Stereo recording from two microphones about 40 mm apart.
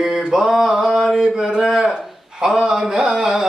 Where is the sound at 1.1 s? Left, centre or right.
Centre.